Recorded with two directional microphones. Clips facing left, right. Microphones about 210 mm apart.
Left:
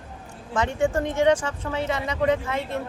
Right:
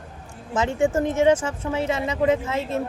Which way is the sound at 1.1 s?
25° right (ahead or behind).